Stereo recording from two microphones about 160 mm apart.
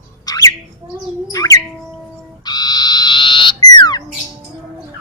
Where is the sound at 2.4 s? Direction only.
25° left (ahead or behind).